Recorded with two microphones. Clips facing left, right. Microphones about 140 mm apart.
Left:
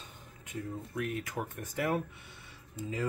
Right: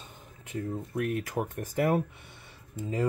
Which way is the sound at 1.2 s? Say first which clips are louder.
Right 6 dB; 35° right (ahead or behind).